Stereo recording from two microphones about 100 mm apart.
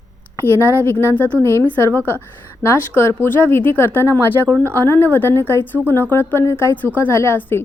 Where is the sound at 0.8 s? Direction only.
20° left (ahead or behind).